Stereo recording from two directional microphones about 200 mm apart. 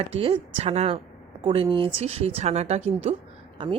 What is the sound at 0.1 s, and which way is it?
A woman's voice, 30° right (ahead or behind).